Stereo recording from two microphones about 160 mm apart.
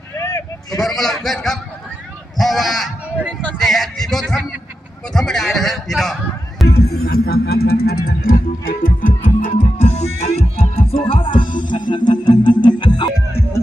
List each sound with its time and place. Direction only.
0.2 s vehicle: 15° left (ahead or behind)
0.7 s speech: centre (ahead or behind)
6.7 s music: 75° left (ahead or behind)
8.8 s music: 60° left (ahead or behind); by 13.1 s 30° left (ahead or behind)